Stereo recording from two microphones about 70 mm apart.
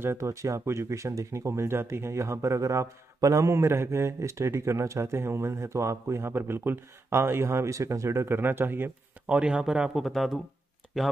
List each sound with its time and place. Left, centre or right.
0.0 s speech: right
9.4 s speech: centre